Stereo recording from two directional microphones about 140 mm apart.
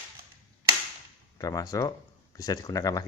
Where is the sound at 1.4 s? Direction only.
25° left (ahead or behind).